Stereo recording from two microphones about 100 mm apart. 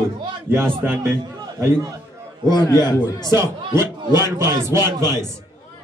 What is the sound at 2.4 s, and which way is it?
Speech, 40° left (ahead or behind).